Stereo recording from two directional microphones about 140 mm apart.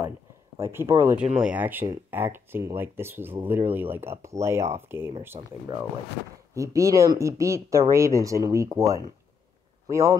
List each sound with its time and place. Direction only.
0.7 s speech: 20° right (ahead or behind)
1.1 s speech: 5° right (ahead or behind)
5.4 s speech: 40° right (ahead or behind)
6.5 s a man's voice: 20° right (ahead or behind)